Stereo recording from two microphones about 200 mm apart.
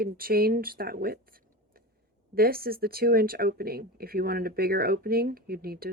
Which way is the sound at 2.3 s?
50° right (ahead or behind).